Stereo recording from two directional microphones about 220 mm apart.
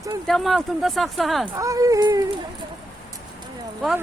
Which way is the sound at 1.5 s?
15° right (ahead or behind).